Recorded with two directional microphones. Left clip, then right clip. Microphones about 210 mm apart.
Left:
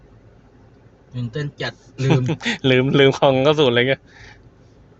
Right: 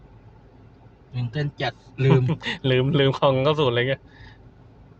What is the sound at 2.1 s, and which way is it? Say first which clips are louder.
Speech: left 3 dB; 30° left (ahead or behind).